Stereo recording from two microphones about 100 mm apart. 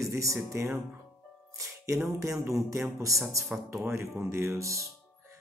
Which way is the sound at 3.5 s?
10° right (ahead or behind).